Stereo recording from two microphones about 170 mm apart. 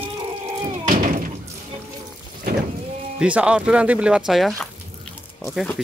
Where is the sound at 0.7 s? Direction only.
50° right (ahead or behind).